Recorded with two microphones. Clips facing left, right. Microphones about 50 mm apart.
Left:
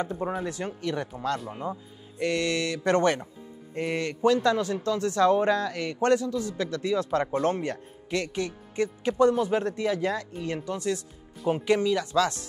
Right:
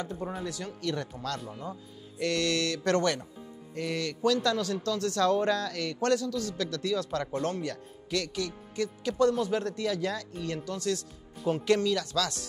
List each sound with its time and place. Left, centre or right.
0.0 s speech: left
0.8 s speech: centre